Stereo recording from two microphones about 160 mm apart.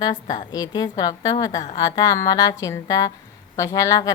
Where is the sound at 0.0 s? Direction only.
25° left (ahead or behind).